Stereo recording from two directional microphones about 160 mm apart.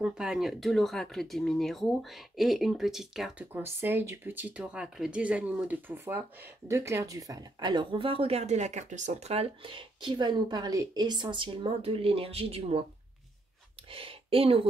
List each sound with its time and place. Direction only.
0.0 s speech: 5° right (ahead or behind); by 12.8 s 40° right (ahead or behind)
13.9 s speech: 35° right (ahead or behind)